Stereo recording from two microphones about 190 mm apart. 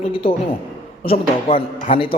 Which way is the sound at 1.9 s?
25° left (ahead or behind).